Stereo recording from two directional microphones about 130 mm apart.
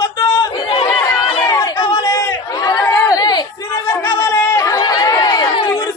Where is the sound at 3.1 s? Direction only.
30° left (ahead or behind).